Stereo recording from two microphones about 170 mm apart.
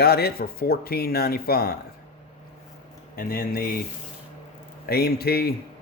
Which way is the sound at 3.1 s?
60° left (ahead or behind).